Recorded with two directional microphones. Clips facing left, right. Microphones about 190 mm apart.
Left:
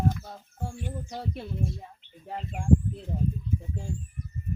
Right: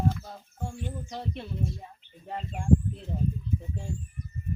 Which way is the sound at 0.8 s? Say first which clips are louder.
Left 1 dB; 5° left (ahead or behind).